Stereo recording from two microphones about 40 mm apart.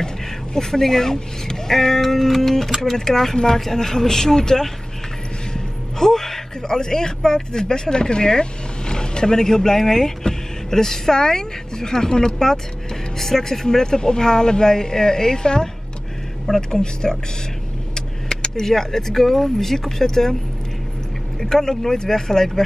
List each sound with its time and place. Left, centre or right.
0.6 s speech: centre
21.4 s speech: centre